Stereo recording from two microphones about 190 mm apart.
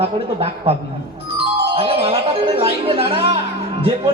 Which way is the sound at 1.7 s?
30° right (ahead or behind).